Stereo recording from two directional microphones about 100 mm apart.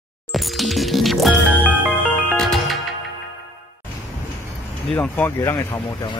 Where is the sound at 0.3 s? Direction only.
Centre (ahead or behind).